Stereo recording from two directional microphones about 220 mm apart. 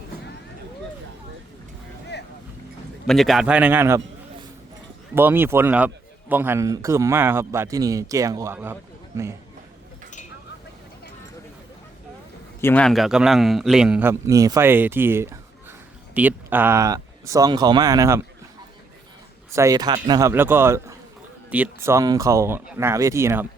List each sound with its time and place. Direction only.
3.1 s a man's voice: centre (ahead or behind)
5.1 s a man's voice: 10° right (ahead or behind)
12.6 s a man's voice: 5° left (ahead or behind); by 18.2 s 15° right (ahead or behind)
19.5 s a man's voice: 15° right (ahead or behind)